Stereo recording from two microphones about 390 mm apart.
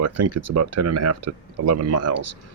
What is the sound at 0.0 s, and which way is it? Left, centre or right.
Speech, right.